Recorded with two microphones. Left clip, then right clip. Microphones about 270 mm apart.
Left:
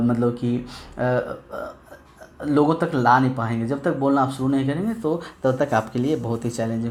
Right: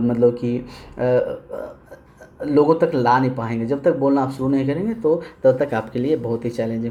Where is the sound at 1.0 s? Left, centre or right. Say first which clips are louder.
Right 4 dB; left.